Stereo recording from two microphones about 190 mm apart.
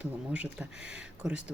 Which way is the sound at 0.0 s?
10° right (ahead or behind).